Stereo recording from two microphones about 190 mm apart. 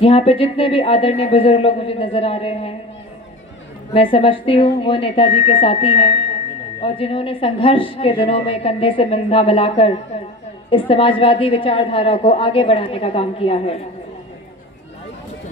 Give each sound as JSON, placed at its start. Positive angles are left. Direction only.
{"t": 0.0, "sound": "speech", "side_deg": 30}
{"t": 3.9, "sound": "a woman's voice", "side_deg": 30}